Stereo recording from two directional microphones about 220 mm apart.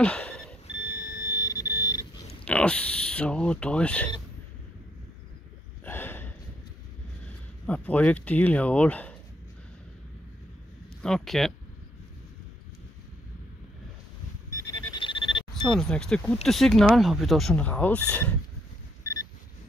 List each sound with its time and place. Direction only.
0.0 s alarm clock: 5° left (ahead or behind)
1.4 s alarm clock: 15° left (ahead or behind)
2.4 s speech: 5° left (ahead or behind)
5.9 s a sound: 10° left (ahead or behind)
7.6 s speech: 5° left (ahead or behind)
11.0 s speech: centre (ahead or behind)
14.5 s a sound: 15° left (ahead or behind)
15.5 s speech: centre (ahead or behind)